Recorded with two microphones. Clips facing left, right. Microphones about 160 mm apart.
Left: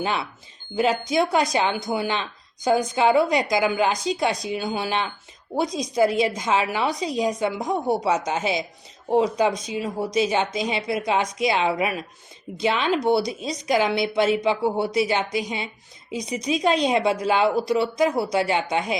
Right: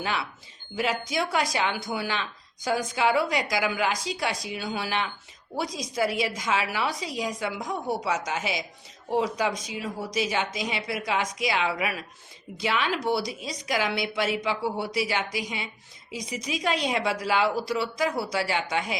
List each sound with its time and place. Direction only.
0.0 s a woman's voice: 25° left (ahead or behind)